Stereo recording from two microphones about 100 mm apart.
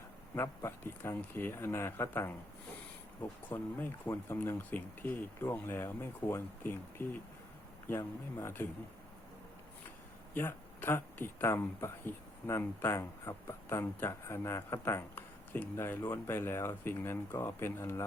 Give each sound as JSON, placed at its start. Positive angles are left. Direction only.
{"t": 0.3, "sound": "speech", "side_deg": 25}
{"t": 10.3, "sound": "speech", "side_deg": 20}